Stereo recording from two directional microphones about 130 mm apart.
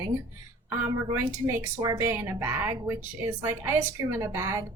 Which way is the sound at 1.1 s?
20° right (ahead or behind).